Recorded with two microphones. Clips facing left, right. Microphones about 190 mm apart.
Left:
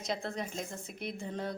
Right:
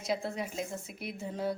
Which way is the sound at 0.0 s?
10° right (ahead or behind).